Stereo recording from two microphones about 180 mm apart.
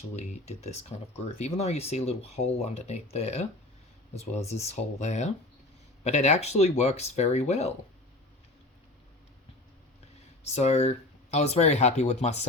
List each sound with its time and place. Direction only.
0.2 s speech: 40° left (ahead or behind)
10.5 s speech: 35° left (ahead or behind)